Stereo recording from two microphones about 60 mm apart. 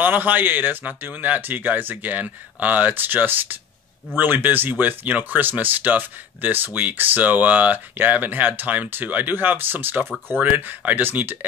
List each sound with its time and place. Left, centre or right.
0.0 s speech: right